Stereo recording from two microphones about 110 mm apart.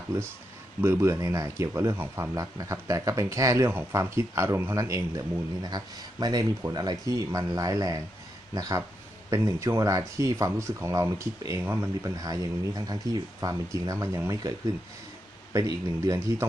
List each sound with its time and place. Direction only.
0.8 s speech: 25° right (ahead or behind)
5.6 s speech: 40° right (ahead or behind)
9.3 s speech: 25° right (ahead or behind)
15.5 s speech: 30° right (ahead or behind)